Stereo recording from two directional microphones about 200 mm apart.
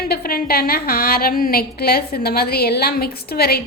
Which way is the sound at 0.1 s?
50° left (ahead or behind).